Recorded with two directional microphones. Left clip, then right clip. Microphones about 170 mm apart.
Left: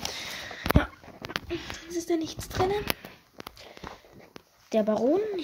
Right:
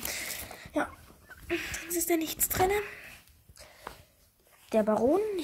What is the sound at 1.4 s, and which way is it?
Speech, centre (ahead or behind).